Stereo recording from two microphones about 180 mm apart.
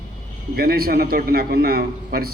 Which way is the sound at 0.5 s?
60° right (ahead or behind).